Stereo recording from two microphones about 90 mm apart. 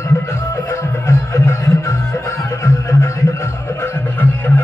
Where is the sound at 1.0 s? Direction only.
30° left (ahead or behind).